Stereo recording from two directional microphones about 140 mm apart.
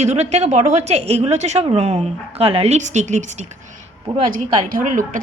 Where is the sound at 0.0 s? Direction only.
50° right (ahead or behind).